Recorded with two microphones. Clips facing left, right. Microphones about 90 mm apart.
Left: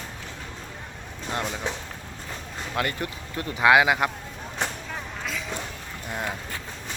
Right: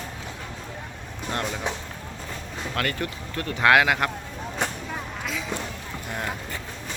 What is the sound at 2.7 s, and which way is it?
Speech, 20° left (ahead or behind).